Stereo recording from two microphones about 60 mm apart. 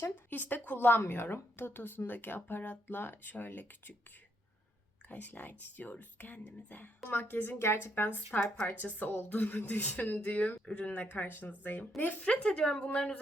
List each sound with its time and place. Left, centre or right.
0.0 s a woman's voice: left
5.0 s a woman's voice: left
12.2 s a woman's voice: left